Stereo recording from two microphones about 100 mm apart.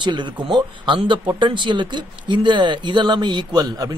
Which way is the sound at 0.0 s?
50° right (ahead or behind).